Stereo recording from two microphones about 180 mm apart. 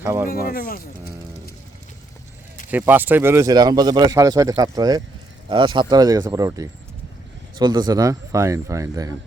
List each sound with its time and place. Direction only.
0.0 s speech: 10° right (ahead or behind)
0.3 s speech: 55° left (ahead or behind)
2.6 s speech: 10° right (ahead or behind)